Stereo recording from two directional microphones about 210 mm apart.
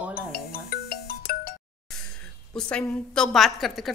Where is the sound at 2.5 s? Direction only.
5° left (ahead or behind).